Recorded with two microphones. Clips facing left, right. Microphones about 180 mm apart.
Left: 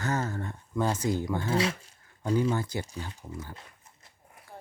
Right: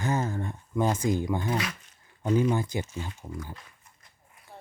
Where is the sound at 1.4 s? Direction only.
25° left (ahead or behind).